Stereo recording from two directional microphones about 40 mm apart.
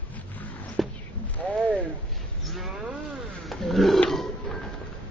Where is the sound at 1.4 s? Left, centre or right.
Left.